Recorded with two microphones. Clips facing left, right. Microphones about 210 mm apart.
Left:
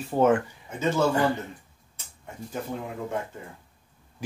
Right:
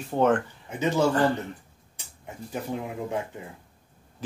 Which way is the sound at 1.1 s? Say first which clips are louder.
Right 1 dB; 15° left (ahead or behind).